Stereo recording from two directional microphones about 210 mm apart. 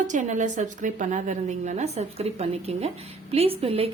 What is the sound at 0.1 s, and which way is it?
A woman's voice, 35° right (ahead or behind).